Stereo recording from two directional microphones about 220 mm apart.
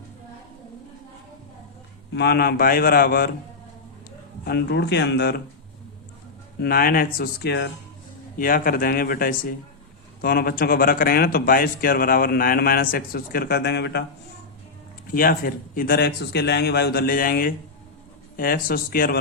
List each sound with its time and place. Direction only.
2.1 s speech: 45° left (ahead or behind)
4.4 s speech: 50° left (ahead or behind)
6.6 s a man's voice: 40° left (ahead or behind)
15.1 s a man's voice: 40° left (ahead or behind)